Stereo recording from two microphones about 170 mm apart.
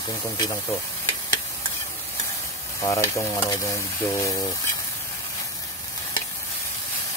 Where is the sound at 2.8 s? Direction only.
20° left (ahead or behind).